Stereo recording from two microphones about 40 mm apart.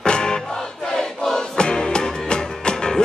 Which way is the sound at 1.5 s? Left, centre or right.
Centre.